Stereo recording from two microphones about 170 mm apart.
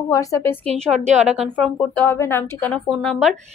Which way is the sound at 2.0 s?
15° left (ahead or behind).